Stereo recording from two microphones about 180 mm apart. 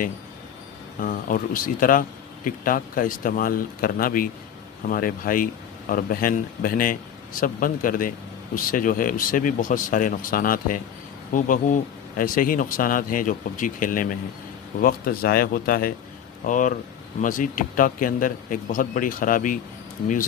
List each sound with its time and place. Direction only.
1.0 s speech: 50° left (ahead or behind)